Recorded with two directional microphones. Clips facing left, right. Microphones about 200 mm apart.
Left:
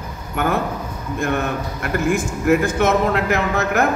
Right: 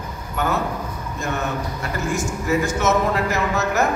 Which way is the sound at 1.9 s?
55° left (ahead or behind).